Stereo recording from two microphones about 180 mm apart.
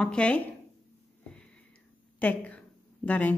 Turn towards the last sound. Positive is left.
turn(degrees=10)  # may be behind; listen again after turning